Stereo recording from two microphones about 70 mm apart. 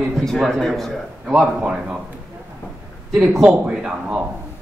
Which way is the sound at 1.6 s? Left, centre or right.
Centre.